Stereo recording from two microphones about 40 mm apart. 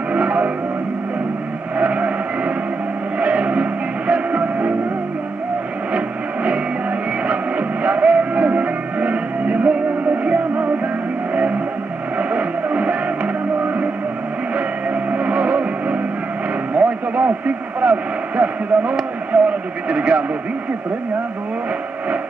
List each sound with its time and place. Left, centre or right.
0.1 s music: right
1.8 s vehicle: right
4.1 s music: right
5.9 s a sound: right
7.8 s music: right
12.2 s music: right
15.0 s music: right
16.7 s vehicle: right
17.7 s a sound: right
19.3 s radio: right
19.9 s a sound: right